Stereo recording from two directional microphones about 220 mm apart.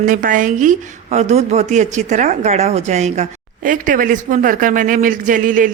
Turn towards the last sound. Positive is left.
turn(degrees=-35)  # may be behind; listen again after turning